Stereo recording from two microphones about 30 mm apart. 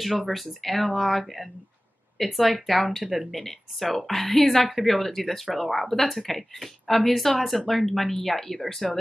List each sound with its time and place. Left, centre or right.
0.0 s speech: centre
3.3 s speech: centre